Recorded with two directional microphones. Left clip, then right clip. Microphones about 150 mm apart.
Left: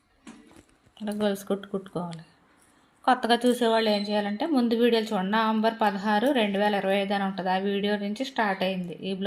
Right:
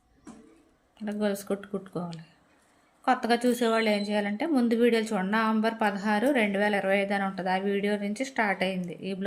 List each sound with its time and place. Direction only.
1.2 s a woman's voice: 10° left (ahead or behind)
8.5 s a woman's voice: 30° right (ahead or behind)